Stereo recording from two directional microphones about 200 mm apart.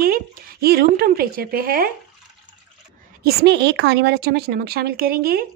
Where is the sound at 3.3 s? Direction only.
55° right (ahead or behind).